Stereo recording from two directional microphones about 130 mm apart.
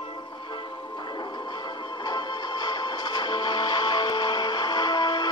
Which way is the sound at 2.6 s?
30° left (ahead or behind).